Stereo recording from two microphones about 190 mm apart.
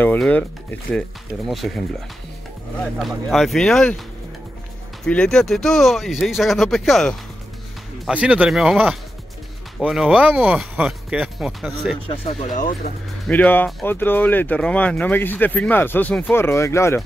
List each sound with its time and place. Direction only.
0.0 s speech: 10° left (ahead or behind)
2.8 s speech: centre (ahead or behind)
5.0 s speech: 5° left (ahead or behind)
12.1 s speech: 35° left (ahead or behind)
13.3 s speech: 10° left (ahead or behind)